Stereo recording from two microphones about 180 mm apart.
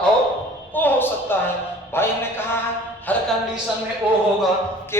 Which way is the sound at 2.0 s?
10° left (ahead or behind).